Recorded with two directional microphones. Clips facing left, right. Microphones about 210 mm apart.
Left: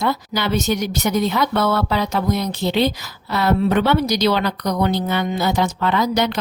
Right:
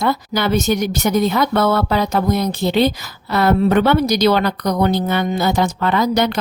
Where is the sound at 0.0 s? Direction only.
50° right (ahead or behind).